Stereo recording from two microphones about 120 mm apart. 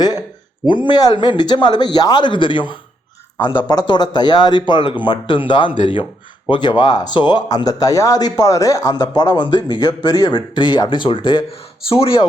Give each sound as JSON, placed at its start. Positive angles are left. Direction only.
{"t": 0.7, "sound": "speech", "side_deg": 40}